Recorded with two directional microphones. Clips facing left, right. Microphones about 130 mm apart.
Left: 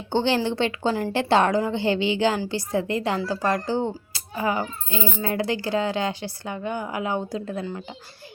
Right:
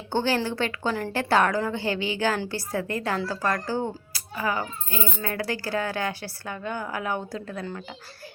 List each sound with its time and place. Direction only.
0.1 s a child's voice: 20° left (ahead or behind)